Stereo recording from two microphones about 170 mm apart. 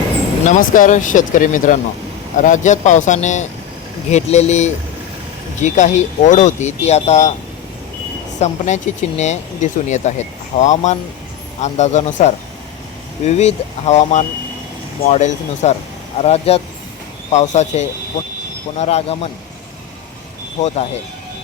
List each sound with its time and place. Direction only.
0.4 s speech: 50° left (ahead or behind)
8.4 s speech: 45° left (ahead or behind)
20.6 s speech: 40° left (ahead or behind)